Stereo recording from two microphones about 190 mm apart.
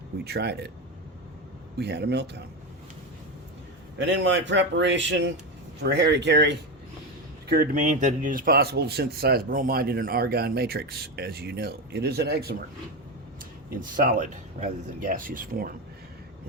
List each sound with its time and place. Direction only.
0.3 s speech: 60° right (ahead or behind)
1.8 s speech: 60° right (ahead or behind)
3.9 s a man's voice: 75° right (ahead or behind)
5.8 s speech: 60° right (ahead or behind)
7.4 s speech: 50° right (ahead or behind)
13.7 s speech: 45° right (ahead or behind)